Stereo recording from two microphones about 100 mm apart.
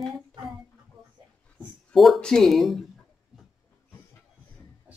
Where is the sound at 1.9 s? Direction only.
Centre (ahead or behind).